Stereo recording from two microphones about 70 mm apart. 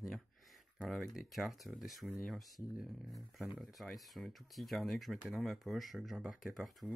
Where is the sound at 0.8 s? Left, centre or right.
Centre.